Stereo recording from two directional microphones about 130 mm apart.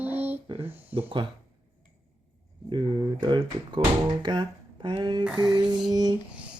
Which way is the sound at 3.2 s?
35° right (ahead or behind).